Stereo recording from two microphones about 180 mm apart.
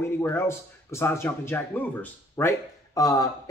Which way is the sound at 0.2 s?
15° left (ahead or behind).